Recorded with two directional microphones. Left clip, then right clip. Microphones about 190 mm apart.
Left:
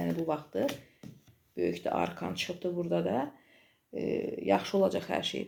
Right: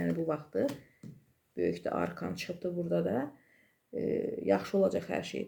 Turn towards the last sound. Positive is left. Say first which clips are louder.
# left 2 dB
turn(degrees=-15)  # may be behind; listen again after turning